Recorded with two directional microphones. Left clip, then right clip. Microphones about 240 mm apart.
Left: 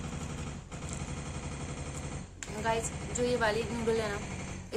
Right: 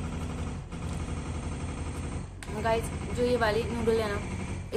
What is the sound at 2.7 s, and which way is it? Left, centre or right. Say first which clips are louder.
A woman's voice: right 3 dB; centre.